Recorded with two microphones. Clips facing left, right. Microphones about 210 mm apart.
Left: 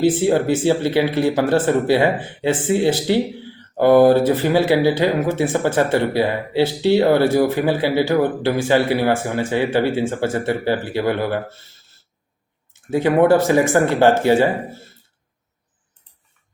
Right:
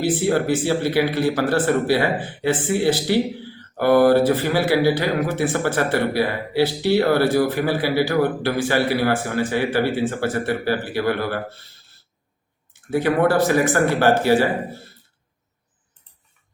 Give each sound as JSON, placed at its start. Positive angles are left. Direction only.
{"t": 0.0, "sound": "speech", "side_deg": 20}
{"t": 12.9, "sound": "speech", "side_deg": 20}